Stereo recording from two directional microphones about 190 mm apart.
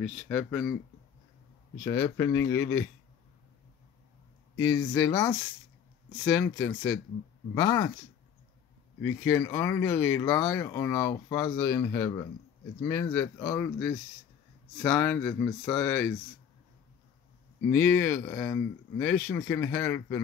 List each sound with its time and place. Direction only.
0.0 s speech: 10° left (ahead or behind)
1.9 s speech: 15° left (ahead or behind)
4.6 s speech: 15° left (ahead or behind)
9.0 s speech: 10° left (ahead or behind)
17.6 s speech: 10° left (ahead or behind)